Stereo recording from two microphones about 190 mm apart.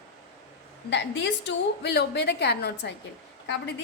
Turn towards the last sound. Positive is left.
turn(degrees=65)  # may be behind; listen again after turning